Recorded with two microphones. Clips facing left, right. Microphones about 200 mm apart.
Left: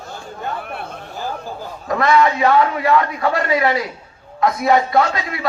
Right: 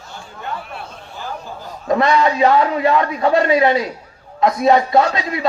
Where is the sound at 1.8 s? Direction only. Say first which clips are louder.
Even; 25° right (ahead or behind).